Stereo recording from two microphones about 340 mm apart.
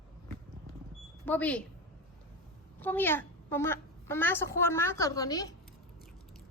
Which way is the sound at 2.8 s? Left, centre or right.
Centre.